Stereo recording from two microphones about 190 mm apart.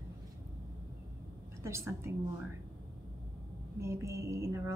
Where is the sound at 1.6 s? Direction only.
15° right (ahead or behind).